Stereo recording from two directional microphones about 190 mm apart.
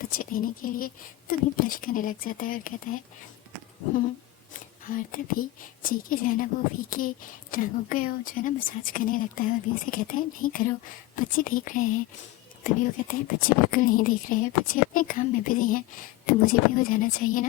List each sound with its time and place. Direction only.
0.0 s a woman's voice: 50° left (ahead or behind)
4.9 s a woman's voice: 45° left (ahead or behind)